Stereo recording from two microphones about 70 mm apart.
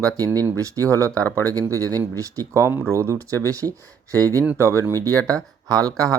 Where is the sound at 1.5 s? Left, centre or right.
Right.